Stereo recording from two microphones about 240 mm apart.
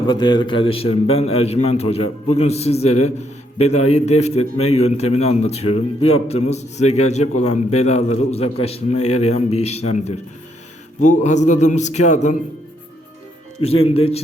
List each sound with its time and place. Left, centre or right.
0.1 s a man's voice: centre
11.2 s a man's voice: left
13.6 s a man's voice: left